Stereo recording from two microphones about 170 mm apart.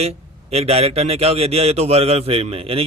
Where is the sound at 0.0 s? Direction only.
40° right (ahead or behind).